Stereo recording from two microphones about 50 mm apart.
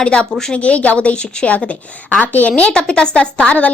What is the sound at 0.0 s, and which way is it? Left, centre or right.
A woman's voice, centre.